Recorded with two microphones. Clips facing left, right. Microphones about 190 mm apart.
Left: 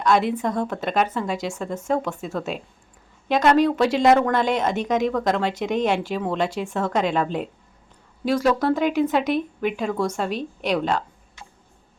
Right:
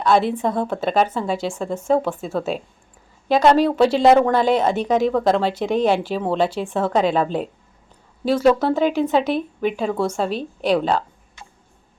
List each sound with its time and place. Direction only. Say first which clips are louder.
0.0 s a woman's voice: right 2 dB; 30° right (ahead or behind)